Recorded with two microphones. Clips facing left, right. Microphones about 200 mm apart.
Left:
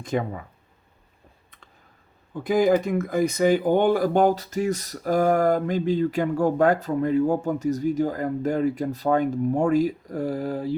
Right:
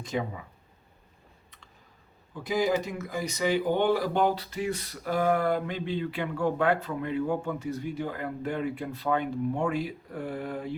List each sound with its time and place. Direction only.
0.0 s speech: 50° left (ahead or behind)
2.3 s speech: 55° left (ahead or behind); by 10.8 s 35° left (ahead or behind)